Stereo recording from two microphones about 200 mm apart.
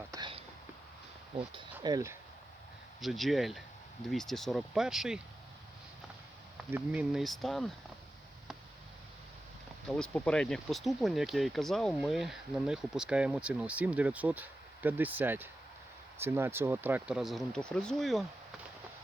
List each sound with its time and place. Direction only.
0.1 s a sound: 25° right (ahead or behind)
1.8 s speech: 15° right (ahead or behind)
3.0 s speech: centre (ahead or behind)
6.7 s speech: 10° right (ahead or behind)
9.9 s speech: 5° left (ahead or behind)